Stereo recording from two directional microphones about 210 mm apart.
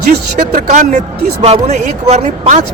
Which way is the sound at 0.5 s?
35° right (ahead or behind).